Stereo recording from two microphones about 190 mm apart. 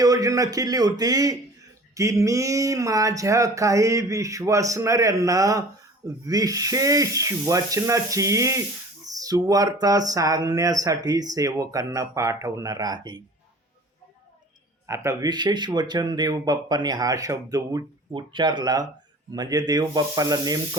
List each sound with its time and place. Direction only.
0.0 s speech: 20° right (ahead or behind)
14.8 s speech: 15° right (ahead or behind)